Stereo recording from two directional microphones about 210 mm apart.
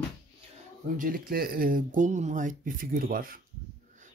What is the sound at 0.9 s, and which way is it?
Speech, 45° right (ahead or behind).